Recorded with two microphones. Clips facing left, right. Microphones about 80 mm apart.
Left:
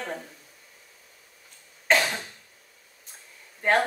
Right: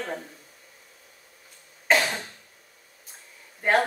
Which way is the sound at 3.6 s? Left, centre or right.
Centre.